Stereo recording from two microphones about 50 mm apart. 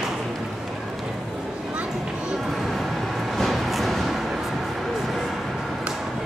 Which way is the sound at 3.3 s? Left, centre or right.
Centre.